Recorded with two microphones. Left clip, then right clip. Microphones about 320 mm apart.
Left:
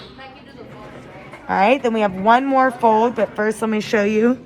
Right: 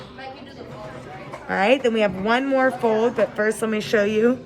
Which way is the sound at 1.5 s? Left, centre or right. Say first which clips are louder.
Left 3 dB; centre.